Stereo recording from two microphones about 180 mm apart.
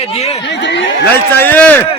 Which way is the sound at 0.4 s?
85° left.